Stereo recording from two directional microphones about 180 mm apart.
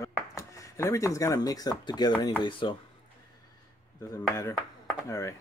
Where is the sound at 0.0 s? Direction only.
15° left (ahead or behind).